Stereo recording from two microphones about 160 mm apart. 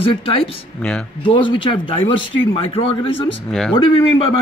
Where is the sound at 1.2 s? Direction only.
30° left (ahead or behind).